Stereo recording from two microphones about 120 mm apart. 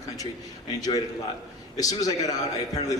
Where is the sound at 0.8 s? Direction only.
30° left (ahead or behind).